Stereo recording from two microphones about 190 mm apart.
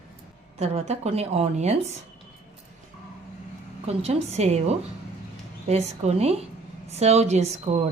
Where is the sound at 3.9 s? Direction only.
35° right (ahead or behind).